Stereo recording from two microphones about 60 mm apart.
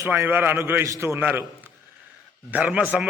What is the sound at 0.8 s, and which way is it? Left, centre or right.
Speech, right.